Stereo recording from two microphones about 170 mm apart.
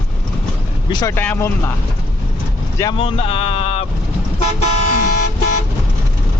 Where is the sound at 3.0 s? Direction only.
35° left (ahead or behind).